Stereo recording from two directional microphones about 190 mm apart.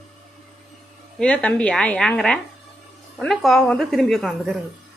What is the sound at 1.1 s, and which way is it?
A woman's voice, 5° left (ahead or behind).